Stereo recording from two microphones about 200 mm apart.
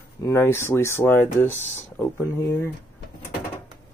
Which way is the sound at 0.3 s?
15° left (ahead or behind).